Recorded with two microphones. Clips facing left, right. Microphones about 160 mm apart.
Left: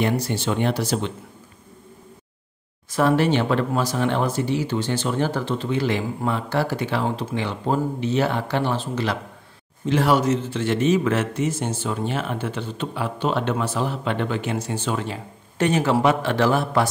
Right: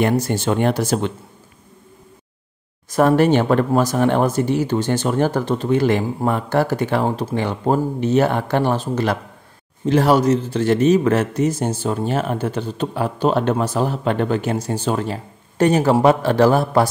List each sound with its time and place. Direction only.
0.0 s speech: 45° right (ahead or behind)
2.9 s a man's voice: 45° right (ahead or behind)